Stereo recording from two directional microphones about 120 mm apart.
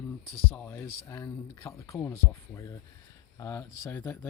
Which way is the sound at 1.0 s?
25° left (ahead or behind).